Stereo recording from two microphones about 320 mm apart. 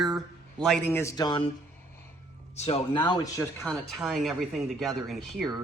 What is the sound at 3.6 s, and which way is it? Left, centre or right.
Speech, centre.